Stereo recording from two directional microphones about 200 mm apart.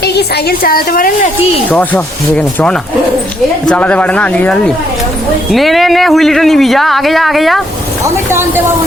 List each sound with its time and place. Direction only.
0.0 s a woman's voice: 55° left (ahead or behind)
1.7 s speech: 5° left (ahead or behind)
8.0 s speech: 10° right (ahead or behind)